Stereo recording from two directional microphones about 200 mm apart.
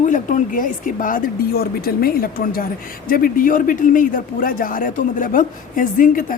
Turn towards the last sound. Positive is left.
turn(degrees=45)  # may be behind; listen again after turning